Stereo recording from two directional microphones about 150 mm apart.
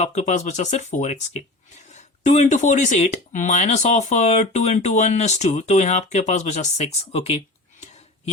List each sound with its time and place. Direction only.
0.0 s speech: 50° left (ahead or behind)